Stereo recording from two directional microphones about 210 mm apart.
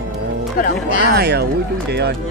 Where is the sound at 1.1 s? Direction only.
50° right (ahead or behind).